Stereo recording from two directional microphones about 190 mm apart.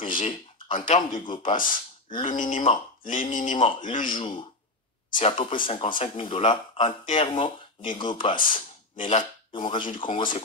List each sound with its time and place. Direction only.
0.0 s a sound: 30° left (ahead or behind)
0.8 s a man's voice: 35° left (ahead or behind)
1.2 s speech: 25° left (ahead or behind)
1.6 s a sound: 45° left (ahead or behind)
2.5 s a man's voice: 30° left (ahead or behind)
3.0 s speech: 45° left (ahead or behind)
3.5 s speech: 30° left (ahead or behind)